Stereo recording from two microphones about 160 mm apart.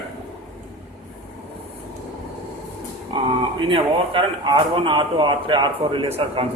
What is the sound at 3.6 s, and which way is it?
A man's voice, 35° right (ahead or behind).